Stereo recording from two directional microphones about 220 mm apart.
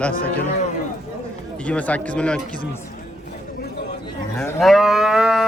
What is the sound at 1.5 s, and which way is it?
A man's voice, 5° left (ahead or behind).